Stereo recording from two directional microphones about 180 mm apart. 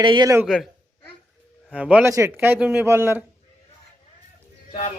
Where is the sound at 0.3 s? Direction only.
Centre (ahead or behind).